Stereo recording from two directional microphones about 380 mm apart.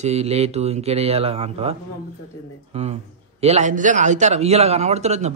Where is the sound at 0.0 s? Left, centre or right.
Centre.